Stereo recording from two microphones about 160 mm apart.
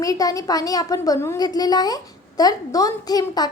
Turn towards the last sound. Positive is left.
turn(degrees=25)  # may be behind; listen again after turning